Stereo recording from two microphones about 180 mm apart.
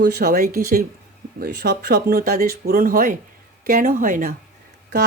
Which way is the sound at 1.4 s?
65° right (ahead or behind).